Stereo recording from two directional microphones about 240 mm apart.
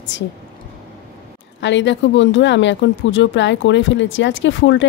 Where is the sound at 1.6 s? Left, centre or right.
Left.